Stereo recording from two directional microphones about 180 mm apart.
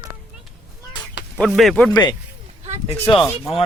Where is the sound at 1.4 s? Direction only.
Centre (ahead or behind).